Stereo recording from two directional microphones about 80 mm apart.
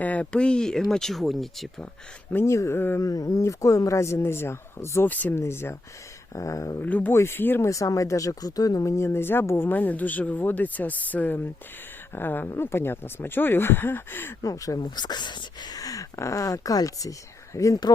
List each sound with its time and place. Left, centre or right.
0.0 s speech: centre
2.4 s speech: left
3.0 s speech: left
5.0 s speech: left
5.3 s speech: left
6.3 s speech: left
6.8 s speech: centre
7.1 s speech: left
7.7 s speech: left
14.4 s speech: left
14.8 s speech: left